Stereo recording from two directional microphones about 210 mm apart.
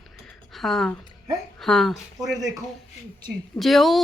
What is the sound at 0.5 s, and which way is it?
A woman's voice, centre (ahead or behind).